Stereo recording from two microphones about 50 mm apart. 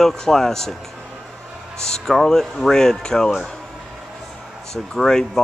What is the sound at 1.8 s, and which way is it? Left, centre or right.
Speech, centre.